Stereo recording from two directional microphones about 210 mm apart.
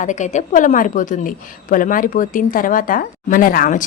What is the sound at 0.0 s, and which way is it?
A woman's voice, 35° left (ahead or behind).